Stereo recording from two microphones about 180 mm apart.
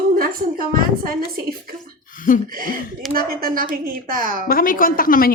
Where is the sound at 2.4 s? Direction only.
50° right (ahead or behind).